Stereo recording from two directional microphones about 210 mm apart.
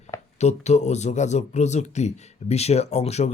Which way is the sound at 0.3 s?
30° left (ahead or behind).